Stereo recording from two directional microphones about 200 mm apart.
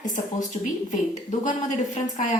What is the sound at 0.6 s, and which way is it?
A woman's voice, 35° left (ahead or behind).